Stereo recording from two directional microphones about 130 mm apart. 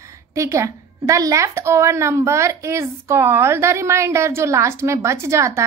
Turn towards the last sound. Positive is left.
turn(degrees=-20)  # may be behind; listen again after turning